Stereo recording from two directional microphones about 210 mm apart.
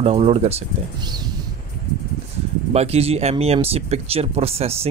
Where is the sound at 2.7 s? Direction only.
30° right (ahead or behind).